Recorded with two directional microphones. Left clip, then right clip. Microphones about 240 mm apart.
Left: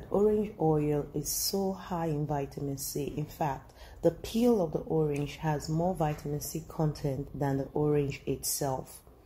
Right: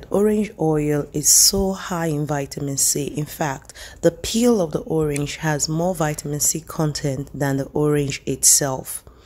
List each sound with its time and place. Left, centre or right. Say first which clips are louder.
0.1 s speech: right 8 dB; right